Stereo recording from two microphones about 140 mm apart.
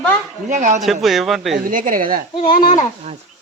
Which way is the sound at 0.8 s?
Centre (ahead or behind).